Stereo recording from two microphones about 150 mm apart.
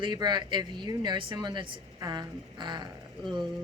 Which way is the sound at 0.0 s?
30° right (ahead or behind).